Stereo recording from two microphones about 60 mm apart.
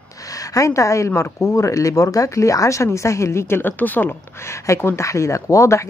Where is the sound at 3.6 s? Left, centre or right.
Left.